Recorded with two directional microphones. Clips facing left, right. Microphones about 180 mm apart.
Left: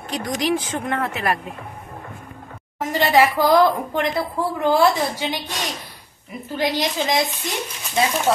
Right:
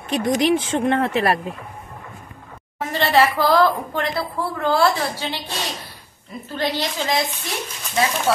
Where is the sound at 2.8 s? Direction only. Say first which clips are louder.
Left 1 dB; 15° left (ahead or behind).